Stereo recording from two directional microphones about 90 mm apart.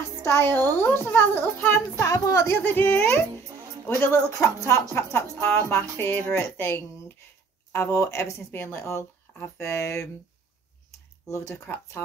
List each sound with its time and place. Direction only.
0.2 s a woman's voice: 25° left (ahead or behind)
2.0 s speech: 40° left (ahead or behind)
2.5 s a woman's voice: 20° left (ahead or behind)